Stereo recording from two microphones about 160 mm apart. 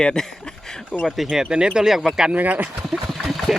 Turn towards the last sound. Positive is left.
turn(degrees=0)  # may be behind; listen again after turning